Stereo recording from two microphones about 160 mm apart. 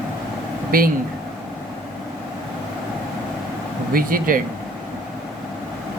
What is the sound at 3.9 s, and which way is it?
Speech, 60° right (ahead or behind).